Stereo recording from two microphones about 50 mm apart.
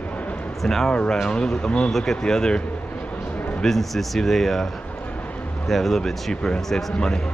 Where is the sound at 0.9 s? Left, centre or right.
Centre.